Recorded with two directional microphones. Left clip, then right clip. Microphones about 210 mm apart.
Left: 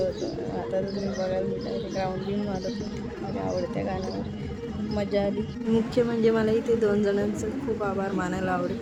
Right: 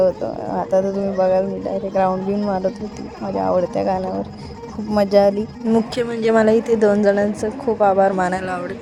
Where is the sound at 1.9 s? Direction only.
30° right (ahead or behind).